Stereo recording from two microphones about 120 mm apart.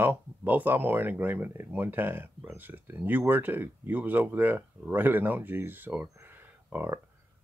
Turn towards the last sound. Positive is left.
turn(degrees=-15)  # may be behind; listen again after turning